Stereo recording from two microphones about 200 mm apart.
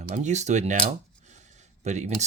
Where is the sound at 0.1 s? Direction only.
35° right (ahead or behind).